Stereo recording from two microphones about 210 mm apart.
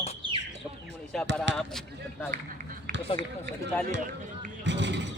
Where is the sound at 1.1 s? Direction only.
Centre (ahead or behind).